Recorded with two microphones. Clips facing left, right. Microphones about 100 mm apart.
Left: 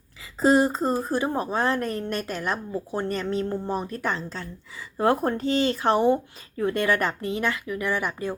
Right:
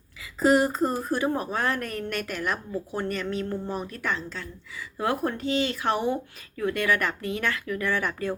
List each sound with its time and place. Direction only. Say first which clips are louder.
0.3 s a woman's voice: left 1 dB; 25° left (ahead or behind)